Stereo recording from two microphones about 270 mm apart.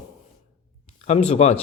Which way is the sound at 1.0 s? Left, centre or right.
Left.